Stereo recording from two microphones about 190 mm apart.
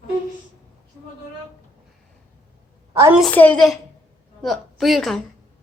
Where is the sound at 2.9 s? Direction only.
15° right (ahead or behind).